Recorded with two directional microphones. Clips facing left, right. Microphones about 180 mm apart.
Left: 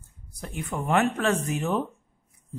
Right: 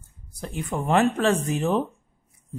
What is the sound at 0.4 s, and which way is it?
Speech, 30° right (ahead or behind).